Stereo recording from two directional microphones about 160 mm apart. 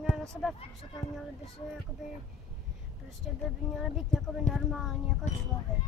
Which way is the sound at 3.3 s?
5° right (ahead or behind).